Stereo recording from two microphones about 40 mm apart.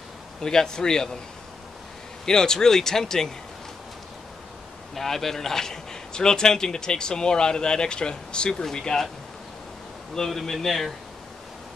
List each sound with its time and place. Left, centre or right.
0.4 s a man's voice: centre
2.2 s a man's voice: centre
4.9 s a man's voice: centre
10.1 s a man's voice: centre